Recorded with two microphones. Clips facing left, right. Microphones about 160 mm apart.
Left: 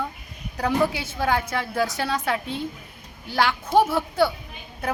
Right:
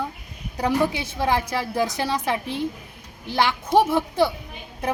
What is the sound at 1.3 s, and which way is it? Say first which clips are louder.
A woman's voice: right 1 dB; 15° right (ahead or behind).